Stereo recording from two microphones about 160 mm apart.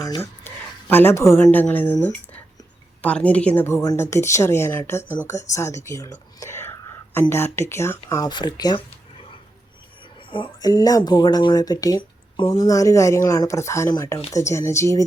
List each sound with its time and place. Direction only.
0.0 s a woman's voice: 15° left (ahead or behind)
10.2 s a woman's voice: 35° left (ahead or behind)